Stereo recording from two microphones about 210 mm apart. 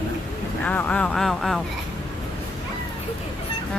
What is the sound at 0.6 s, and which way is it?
A woman's voice, 10° left (ahead or behind).